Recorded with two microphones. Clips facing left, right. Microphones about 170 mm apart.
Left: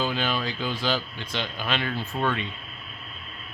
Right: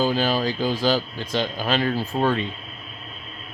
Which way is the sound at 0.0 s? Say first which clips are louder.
Right 6 dB; 35° right (ahead or behind).